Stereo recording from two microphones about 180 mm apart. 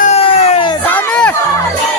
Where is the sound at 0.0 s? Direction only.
35° left (ahead or behind).